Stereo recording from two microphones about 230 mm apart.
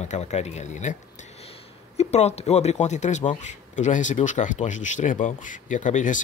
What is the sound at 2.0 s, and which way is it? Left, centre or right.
Speech, left.